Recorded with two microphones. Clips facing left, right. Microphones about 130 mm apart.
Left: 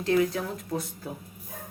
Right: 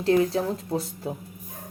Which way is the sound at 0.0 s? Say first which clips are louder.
Right 3 dB; 30° right (ahead or behind).